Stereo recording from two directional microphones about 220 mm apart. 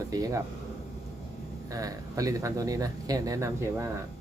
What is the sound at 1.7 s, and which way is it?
Speech, 15° right (ahead or behind).